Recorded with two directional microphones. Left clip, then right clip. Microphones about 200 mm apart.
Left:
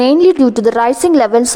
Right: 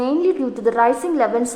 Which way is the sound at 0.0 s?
45° left (ahead or behind).